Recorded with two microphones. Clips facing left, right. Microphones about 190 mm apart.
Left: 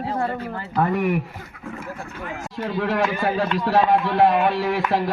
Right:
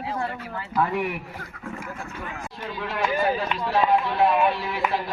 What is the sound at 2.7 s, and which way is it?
Speech, 85° left.